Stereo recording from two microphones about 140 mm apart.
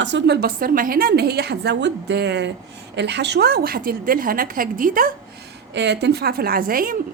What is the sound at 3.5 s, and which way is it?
A woman's voice, 90° right.